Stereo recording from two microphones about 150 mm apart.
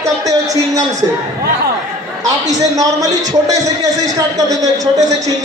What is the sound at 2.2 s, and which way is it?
Speech, 25° right (ahead or behind).